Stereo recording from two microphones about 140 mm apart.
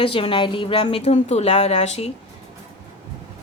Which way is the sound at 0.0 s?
40° left (ahead or behind).